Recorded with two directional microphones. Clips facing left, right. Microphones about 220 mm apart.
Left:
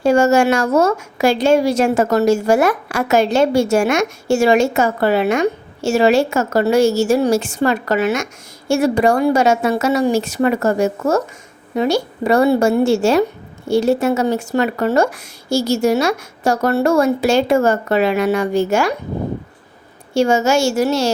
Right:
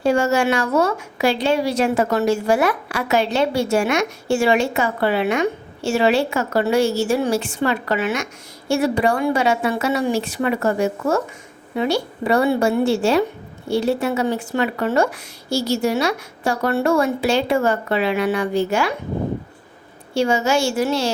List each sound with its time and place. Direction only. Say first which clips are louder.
0.0 s a woman's voice: left 5 dB; 45° left (ahead or behind)
20.1 s a woman's voice: left 4 dB; 45° left (ahead or behind)